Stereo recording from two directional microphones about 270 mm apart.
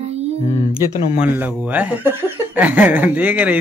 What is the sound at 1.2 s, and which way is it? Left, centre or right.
Speech, centre.